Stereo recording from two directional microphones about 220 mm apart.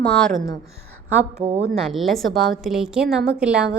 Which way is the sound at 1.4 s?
30° right (ahead or behind).